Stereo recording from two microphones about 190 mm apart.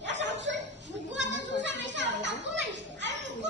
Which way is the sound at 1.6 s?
70° right (ahead or behind).